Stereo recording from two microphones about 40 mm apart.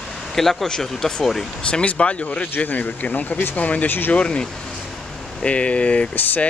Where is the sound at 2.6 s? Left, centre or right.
Left.